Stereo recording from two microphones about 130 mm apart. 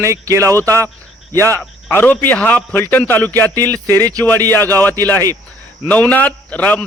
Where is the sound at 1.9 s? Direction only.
15° left (ahead or behind).